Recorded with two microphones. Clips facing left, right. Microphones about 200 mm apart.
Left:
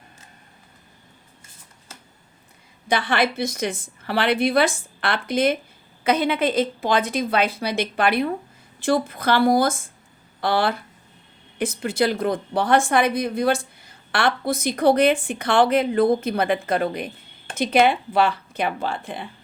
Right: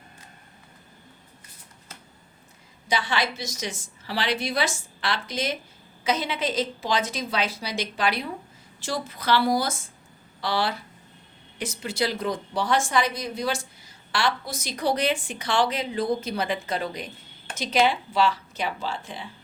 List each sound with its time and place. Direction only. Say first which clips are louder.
2.9 s a woman's voice: left 5 dB; 55° left (ahead or behind)